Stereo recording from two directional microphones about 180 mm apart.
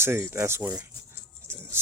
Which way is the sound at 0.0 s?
15° right (ahead or behind).